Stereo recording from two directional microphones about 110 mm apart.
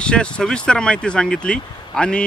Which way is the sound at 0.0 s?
10° left (ahead or behind).